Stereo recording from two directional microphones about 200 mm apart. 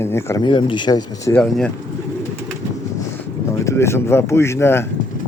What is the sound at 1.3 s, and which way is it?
Speech, 5° left (ahead or behind).